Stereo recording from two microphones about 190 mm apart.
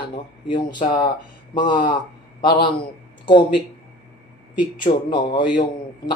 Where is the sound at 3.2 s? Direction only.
25° left (ahead or behind).